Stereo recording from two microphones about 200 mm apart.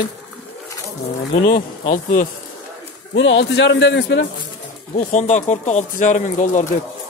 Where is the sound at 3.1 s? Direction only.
65° left (ahead or behind).